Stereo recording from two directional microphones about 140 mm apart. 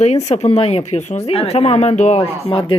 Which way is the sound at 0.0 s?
55° left (ahead or behind).